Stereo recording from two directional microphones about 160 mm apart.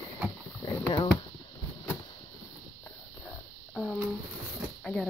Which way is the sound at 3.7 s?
Centre (ahead or behind).